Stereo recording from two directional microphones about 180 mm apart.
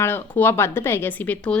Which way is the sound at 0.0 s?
10° left (ahead or behind).